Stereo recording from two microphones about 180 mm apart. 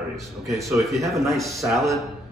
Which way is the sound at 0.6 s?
Centre (ahead or behind).